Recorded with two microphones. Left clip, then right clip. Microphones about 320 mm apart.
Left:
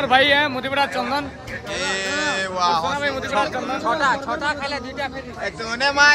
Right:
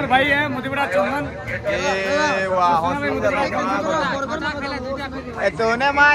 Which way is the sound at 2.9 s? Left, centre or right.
Left.